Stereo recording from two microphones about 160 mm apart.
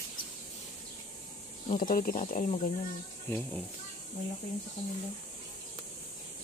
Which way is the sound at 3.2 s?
10° left (ahead or behind).